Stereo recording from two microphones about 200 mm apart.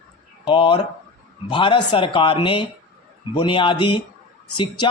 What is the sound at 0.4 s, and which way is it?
Speech, 25° left (ahead or behind).